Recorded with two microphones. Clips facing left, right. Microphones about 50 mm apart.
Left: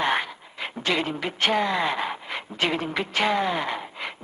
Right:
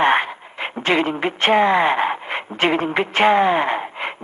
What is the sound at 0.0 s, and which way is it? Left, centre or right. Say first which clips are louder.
A woman's voice: right 8 dB; right.